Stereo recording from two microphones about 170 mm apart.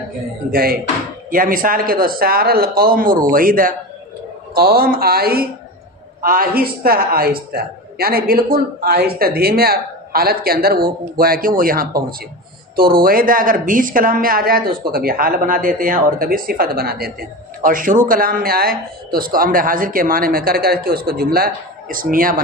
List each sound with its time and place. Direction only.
0.5 s speech: 60° right (ahead or behind)